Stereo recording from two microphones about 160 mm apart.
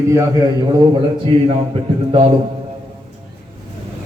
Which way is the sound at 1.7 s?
35° right (ahead or behind).